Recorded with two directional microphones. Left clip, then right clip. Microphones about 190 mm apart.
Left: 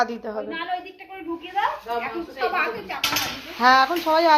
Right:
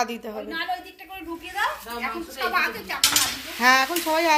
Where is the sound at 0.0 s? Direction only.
25° right (ahead or behind).